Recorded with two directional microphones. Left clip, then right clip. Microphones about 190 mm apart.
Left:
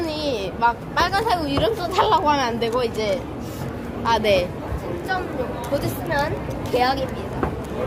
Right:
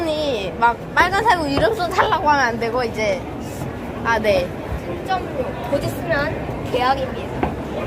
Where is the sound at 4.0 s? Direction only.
15° left (ahead or behind).